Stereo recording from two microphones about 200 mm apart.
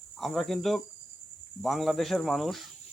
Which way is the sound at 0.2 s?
Centre (ahead or behind).